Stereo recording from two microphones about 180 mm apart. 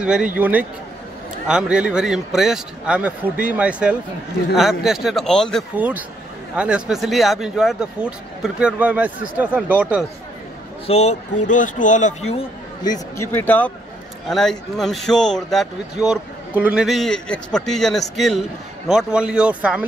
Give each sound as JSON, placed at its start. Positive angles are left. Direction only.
{"t": 0.0, "sound": "a man's voice", "side_deg": -5}
{"t": 5.8, "sound": "a man's voice", "side_deg": -10}
{"t": 10.9, "sound": "a man's voice", "side_deg": 35}
{"t": 12.8, "sound": "speech", "side_deg": 20}
{"t": 13.3, "sound": "speech", "side_deg": 10}